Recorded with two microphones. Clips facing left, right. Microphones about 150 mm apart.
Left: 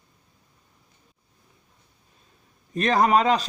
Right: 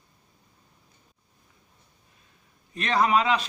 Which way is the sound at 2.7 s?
45° left (ahead or behind).